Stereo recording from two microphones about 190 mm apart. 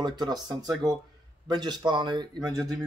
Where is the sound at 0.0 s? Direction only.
20° right (ahead or behind).